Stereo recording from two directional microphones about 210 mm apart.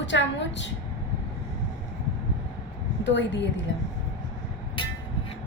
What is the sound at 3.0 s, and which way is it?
Speech, 60° left (ahead or behind).